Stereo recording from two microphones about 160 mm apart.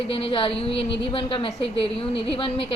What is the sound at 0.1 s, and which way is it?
A woman's voice, 35° left (ahead or behind).